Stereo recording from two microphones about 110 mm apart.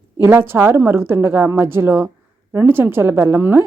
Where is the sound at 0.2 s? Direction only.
25° right (ahead or behind).